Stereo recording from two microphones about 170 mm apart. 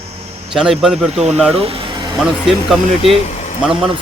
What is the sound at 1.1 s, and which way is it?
Speech, 40° right (ahead or behind).